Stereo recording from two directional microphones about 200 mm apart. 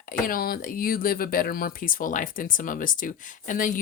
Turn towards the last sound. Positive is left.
turn(degrees=40)  # may be behind; listen again after turning